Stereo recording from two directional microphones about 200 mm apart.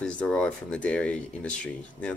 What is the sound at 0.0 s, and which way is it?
Speech, 5° left (ahead or behind).